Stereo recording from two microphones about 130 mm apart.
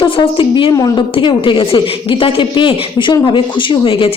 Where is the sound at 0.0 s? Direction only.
40° left (ahead or behind).